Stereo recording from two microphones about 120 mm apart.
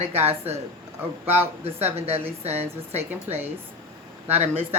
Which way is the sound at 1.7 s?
60° right (ahead or behind).